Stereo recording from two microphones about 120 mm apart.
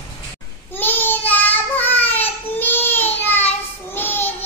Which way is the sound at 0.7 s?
15° left (ahead or behind).